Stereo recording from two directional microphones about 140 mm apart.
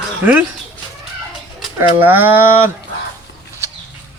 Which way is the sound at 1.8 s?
15° right (ahead or behind).